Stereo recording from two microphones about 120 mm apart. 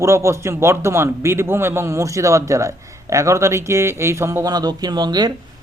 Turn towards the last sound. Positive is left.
turn(degrees=-35)  # may be behind; listen again after turning